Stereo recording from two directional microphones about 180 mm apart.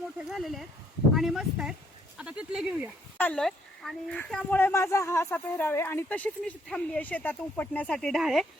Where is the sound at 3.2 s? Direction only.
5° left (ahead or behind).